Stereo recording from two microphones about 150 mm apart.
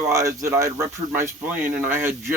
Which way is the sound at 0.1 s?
20° right (ahead or behind).